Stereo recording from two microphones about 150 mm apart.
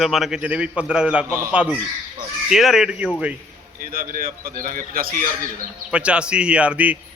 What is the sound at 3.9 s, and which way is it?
A man's voice, 70° right (ahead or behind).